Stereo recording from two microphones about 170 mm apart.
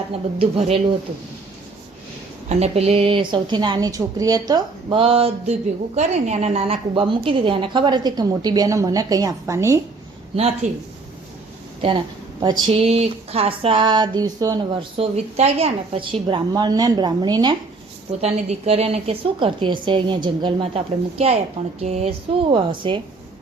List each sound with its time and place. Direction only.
0.1 s a woman's voice: 35° right (ahead or behind)
2.5 s a woman's voice: 40° right (ahead or behind); by 9.8 s 15° right (ahead or behind)
10.3 s a woman's voice: 40° right (ahead or behind)
11.8 s a woman's voice: 30° right (ahead or behind)
14.9 s a woman's voice: 40° right (ahead or behind)
18.2 s a woman's voice: 40° right (ahead or behind)
22.5 s a woman's voice: 30° right (ahead or behind)